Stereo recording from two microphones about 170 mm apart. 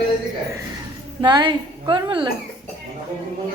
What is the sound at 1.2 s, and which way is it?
Laughter, 25° right (ahead or behind).